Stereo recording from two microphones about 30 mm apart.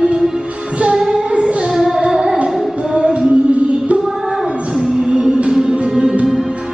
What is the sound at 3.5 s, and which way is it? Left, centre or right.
Music, right.